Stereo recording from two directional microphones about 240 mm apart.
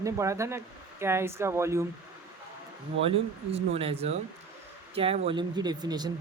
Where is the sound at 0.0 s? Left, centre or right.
Centre.